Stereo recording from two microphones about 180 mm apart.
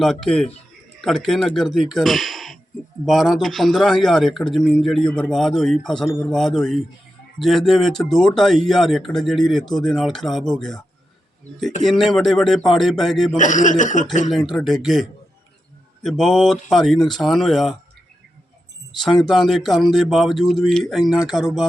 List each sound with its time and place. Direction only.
0.0 s speech: centre (ahead or behind)
11.9 s speech: centre (ahead or behind)
13.3 s speech: 45° left (ahead or behind)
14.3 s speech: centre (ahead or behind)
16.0 s speech: centre (ahead or behind)
18.9 s speech: centre (ahead or behind)